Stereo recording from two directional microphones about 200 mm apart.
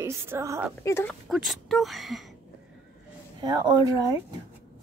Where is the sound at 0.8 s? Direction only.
10° left (ahead or behind).